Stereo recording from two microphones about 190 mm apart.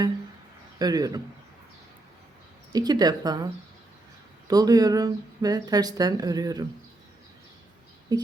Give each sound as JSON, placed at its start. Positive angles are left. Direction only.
{"t": 0.8, "sound": "speech", "side_deg": -20}
{"t": 2.7, "sound": "speech", "side_deg": -20}
{"t": 8.1, "sound": "speech", "side_deg": -20}